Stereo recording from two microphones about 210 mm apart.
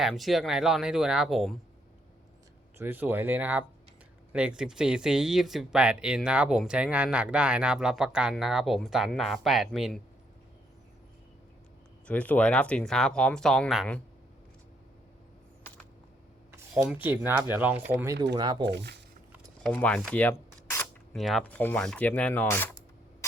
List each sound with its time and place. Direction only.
0.0 s speech: centre (ahead or behind)
2.7 s speech: 10° right (ahead or behind)
12.0 s speech: 5° left (ahead or behind)
16.5 s speech: 5° right (ahead or behind)
18.6 s speech: 55° right (ahead or behind)
19.6 s speech: 5° left (ahead or behind)
21.1 s speech: centre (ahead or behind)